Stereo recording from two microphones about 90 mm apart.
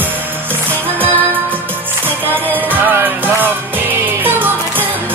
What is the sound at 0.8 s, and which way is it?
Music, 20° right (ahead or behind).